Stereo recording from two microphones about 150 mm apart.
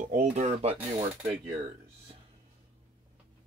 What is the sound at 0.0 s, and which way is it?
Speech, 60° right (ahead or behind).